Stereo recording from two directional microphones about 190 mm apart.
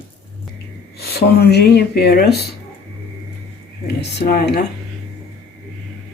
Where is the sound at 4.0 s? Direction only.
60° left (ahead or behind).